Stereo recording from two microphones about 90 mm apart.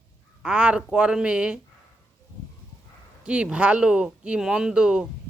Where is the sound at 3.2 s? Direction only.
10° right (ahead or behind).